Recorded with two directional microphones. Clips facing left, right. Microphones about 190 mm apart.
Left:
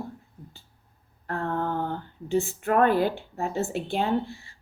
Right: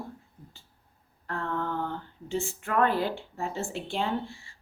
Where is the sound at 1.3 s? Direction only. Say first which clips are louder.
Left 3 dB; 45° left (ahead or behind).